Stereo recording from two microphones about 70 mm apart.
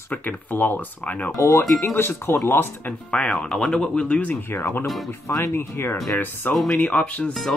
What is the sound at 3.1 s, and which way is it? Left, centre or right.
Speech, centre.